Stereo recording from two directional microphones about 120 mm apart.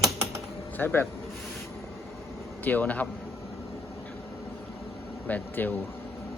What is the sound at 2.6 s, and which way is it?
Speech, 15° left (ahead or behind).